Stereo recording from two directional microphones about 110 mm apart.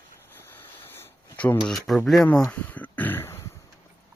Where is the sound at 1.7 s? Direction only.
Centre (ahead or behind).